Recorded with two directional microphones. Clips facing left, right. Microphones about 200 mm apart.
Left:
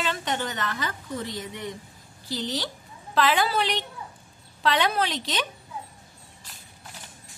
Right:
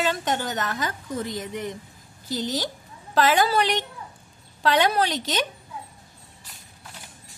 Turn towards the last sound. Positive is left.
turn(degrees=-45)  # may be behind; listen again after turning